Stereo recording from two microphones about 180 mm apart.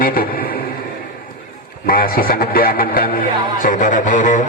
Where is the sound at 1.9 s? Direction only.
55° left (ahead or behind).